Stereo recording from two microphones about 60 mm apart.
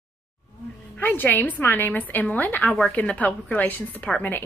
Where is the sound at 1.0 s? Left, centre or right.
Left.